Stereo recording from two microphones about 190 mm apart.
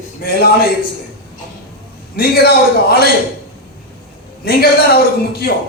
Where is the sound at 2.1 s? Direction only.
55° left (ahead or behind).